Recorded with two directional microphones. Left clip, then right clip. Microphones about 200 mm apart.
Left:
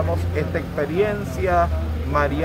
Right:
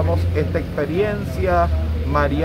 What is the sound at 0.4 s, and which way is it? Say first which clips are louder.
Speech: right 1 dB; 5° left (ahead or behind).